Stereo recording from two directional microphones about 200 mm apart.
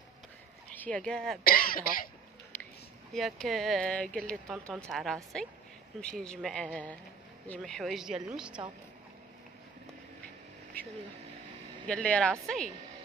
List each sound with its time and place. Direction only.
0.7 s speech: 5° left (ahead or behind)
1.4 s speech: 45° left (ahead or behind)
3.1 s speech: centre (ahead or behind)
11.9 s speech: 5° left (ahead or behind)